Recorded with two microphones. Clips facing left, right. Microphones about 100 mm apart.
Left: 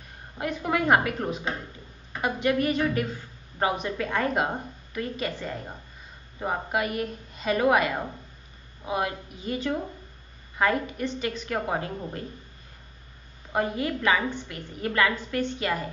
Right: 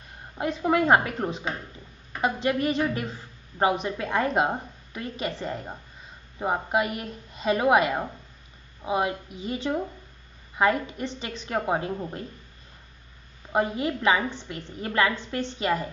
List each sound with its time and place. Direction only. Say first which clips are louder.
0.4 s a woman's voice: right 3 dB; 25° right (ahead or behind)
13.5 s a woman's voice: right 2 dB; 25° right (ahead or behind)